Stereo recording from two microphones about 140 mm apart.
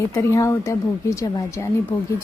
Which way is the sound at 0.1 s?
20° left (ahead or behind).